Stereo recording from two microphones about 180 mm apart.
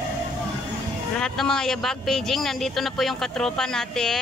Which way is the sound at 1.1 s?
5° left (ahead or behind).